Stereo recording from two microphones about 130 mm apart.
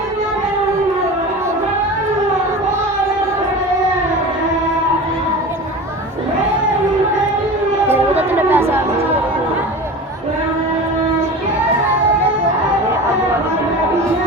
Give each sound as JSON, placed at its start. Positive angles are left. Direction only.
{"t": 8.3, "sound": "chatter", "side_deg": -15}